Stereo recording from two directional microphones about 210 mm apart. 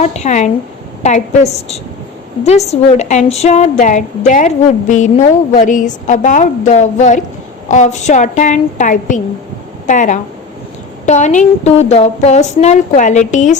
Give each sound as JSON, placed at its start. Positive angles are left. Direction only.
{"t": 0.0, "sound": "a woman's voice", "side_deg": 30}